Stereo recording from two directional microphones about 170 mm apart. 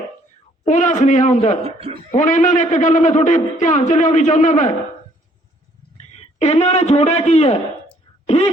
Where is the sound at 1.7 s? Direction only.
35° right (ahead or behind).